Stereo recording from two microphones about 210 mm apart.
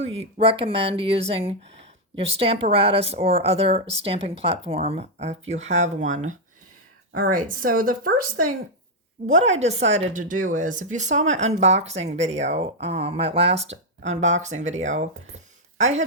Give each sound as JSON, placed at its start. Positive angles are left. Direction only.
{"t": 0.0, "sound": "speech", "side_deg": -30}